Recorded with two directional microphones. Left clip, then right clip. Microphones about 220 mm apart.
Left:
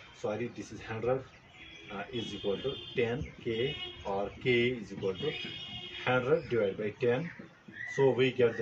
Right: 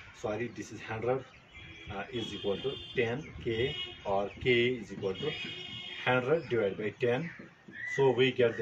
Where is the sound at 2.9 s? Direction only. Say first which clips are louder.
Even; 15° right (ahead or behind).